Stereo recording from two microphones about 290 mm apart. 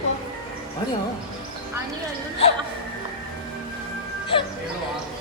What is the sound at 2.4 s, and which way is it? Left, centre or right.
Speech, left.